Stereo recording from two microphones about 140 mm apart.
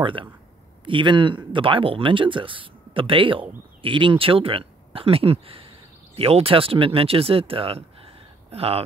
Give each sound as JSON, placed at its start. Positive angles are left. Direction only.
{"t": 0.0, "sound": "speech", "side_deg": -40}